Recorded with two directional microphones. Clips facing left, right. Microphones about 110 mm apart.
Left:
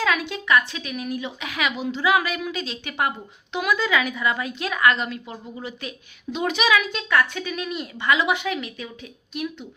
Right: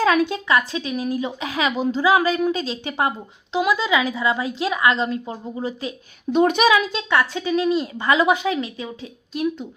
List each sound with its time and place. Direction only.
0.0 s a woman's voice: 40° right (ahead or behind)
6.3 s a woman's voice: 45° right (ahead or behind)
6.7 s a woman's voice: 30° right (ahead or behind)